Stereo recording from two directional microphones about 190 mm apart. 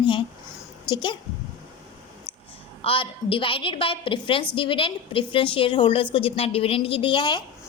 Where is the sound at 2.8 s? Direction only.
30° left (ahead or behind).